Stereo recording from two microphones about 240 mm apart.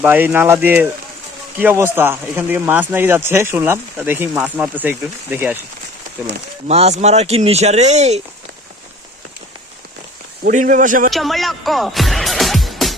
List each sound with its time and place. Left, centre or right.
0.0 s speech: centre
6.7 s speech: right
10.4 s speech: right
11.1 s music: centre